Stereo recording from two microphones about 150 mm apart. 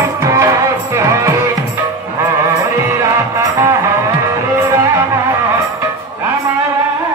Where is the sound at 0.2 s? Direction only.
20° right (ahead or behind).